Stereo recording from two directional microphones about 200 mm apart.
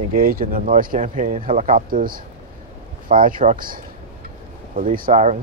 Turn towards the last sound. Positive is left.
turn(degrees=-40)  # may be behind; listen again after turning